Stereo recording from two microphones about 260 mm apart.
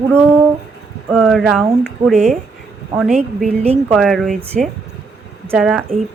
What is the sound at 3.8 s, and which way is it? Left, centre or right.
Speech, centre.